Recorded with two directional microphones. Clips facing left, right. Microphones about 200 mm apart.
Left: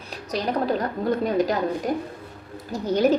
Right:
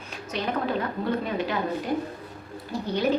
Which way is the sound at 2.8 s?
45° left (ahead or behind).